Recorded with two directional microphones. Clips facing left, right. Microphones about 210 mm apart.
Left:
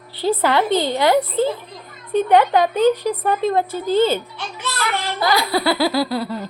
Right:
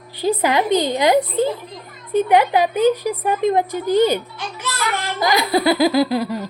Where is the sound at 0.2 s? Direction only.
15° right (ahead or behind).